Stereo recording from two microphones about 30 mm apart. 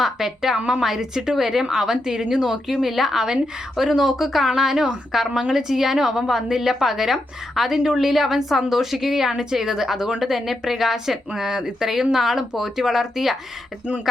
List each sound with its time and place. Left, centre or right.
0.0 s a woman's voice: centre
2.6 s a woman's voice: centre